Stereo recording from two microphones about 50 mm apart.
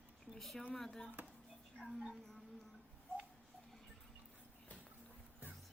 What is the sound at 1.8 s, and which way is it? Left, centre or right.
Speech, right.